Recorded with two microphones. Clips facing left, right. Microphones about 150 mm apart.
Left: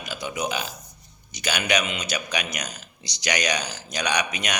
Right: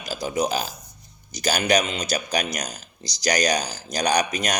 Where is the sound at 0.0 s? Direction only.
35° right (ahead or behind).